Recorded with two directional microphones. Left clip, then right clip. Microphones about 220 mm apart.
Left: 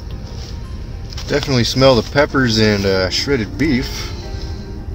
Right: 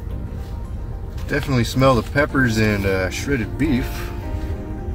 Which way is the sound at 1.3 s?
20° left (ahead or behind).